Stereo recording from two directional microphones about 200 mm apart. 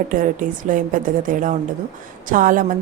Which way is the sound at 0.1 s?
40° right (ahead or behind).